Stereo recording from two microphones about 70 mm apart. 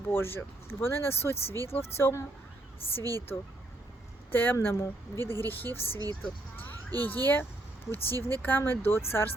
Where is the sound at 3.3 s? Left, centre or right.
Left.